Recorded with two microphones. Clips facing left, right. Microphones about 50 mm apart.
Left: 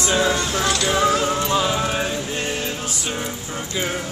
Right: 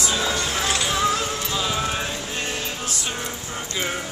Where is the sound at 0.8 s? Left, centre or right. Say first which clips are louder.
Left 4 dB; centre.